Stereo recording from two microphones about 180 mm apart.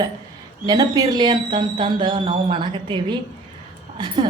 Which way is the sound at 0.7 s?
20° right (ahead or behind).